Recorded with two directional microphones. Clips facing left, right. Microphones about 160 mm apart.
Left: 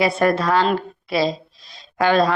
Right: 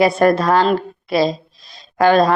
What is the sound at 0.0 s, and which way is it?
Speech, 40° right (ahead or behind).